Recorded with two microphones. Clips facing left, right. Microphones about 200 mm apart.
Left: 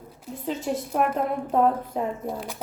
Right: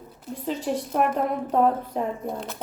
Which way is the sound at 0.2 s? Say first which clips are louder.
Right 1 dB; 5° left (ahead or behind).